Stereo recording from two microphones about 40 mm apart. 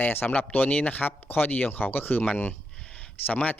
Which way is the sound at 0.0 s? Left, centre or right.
Left.